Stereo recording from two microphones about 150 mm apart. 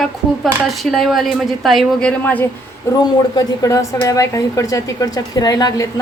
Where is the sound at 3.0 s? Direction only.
25° left (ahead or behind).